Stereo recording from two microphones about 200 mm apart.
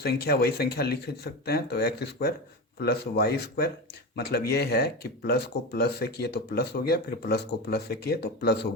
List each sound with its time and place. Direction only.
0.0 s speech: 50° left (ahead or behind)